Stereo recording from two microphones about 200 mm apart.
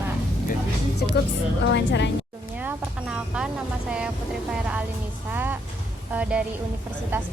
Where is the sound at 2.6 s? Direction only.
5° right (ahead or behind).